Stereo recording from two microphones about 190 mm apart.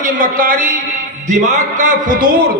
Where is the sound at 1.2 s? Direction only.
40° right (ahead or behind).